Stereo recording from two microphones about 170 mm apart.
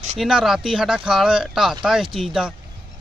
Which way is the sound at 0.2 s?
Centre (ahead or behind).